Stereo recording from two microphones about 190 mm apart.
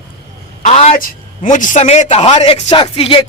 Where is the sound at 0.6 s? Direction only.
35° left (ahead or behind).